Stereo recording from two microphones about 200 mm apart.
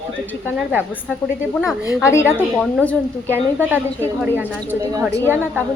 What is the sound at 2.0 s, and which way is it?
Speech, 15° left (ahead or behind).